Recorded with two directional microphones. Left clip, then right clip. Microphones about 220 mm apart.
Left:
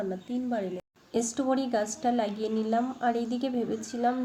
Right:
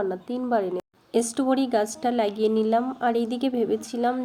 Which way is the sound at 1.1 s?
40° right (ahead or behind).